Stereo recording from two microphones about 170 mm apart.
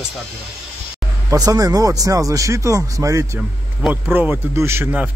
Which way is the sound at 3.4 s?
5° right (ahead or behind).